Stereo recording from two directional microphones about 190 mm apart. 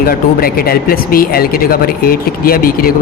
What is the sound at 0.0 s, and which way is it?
Speech, 50° left (ahead or behind).